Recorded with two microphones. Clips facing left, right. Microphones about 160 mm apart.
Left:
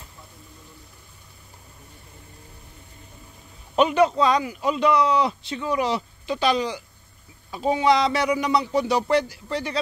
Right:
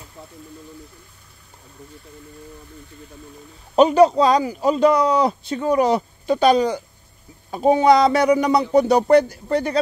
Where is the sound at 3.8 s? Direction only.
35° right (ahead or behind).